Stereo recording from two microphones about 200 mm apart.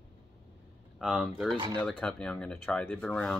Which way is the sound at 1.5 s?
20° right (ahead or behind).